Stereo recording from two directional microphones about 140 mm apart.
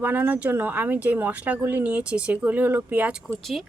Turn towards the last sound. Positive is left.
turn(degrees=0)  # may be behind; listen again after turning